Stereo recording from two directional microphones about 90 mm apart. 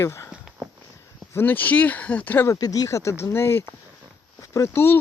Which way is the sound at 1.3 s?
20° left (ahead or behind).